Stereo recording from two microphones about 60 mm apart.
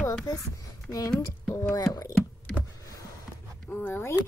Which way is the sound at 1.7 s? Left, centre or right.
Left.